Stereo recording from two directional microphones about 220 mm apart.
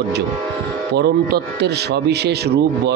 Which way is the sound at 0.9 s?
50° right (ahead or behind).